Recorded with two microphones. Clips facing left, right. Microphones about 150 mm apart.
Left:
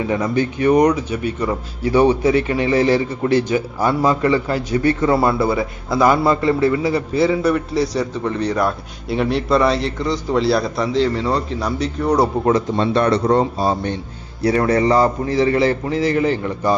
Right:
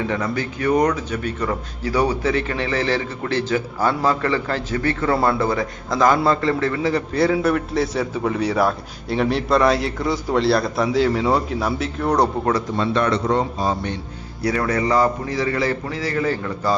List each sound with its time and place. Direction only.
0.1 s a man's voice: 20° left (ahead or behind)
1.9 s a man's voice: 25° left (ahead or behind)
2.2 s a man's voice: 15° left (ahead or behind)
5.1 s a man's voice: 5° left (ahead or behind)
12.5 s a man's voice: 25° left (ahead or behind)